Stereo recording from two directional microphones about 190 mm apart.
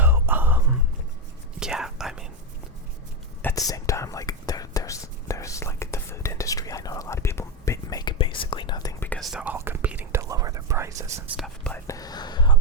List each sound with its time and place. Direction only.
0.0 s music: 10° right (ahead or behind)
1.5 s whispering: 5° right (ahead or behind)
3.4 s whispering: 20° left (ahead or behind)
9.0 s whispering: centre (ahead or behind); by 11.3 s 15° right (ahead or behind)
11.3 s whispering: 5° left (ahead or behind)
11.9 s whispering: 20° left (ahead or behind)